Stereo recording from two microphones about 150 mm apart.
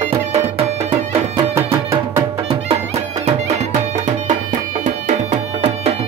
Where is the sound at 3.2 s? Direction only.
50° right (ahead or behind).